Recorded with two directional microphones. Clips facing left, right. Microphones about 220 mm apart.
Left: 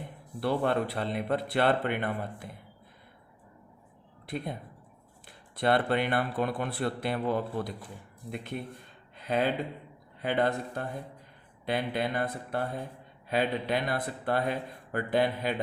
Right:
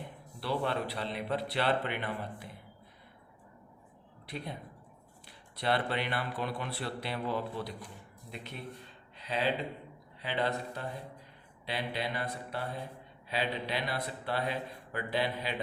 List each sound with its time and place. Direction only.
0.3 s speech: 50° left (ahead or behind)
4.3 s speech: 50° left (ahead or behind)
5.5 s speech: 50° left (ahead or behind)
9.1 s a sound: 50° left (ahead or behind)
10.2 s speech: 50° left (ahead or behind)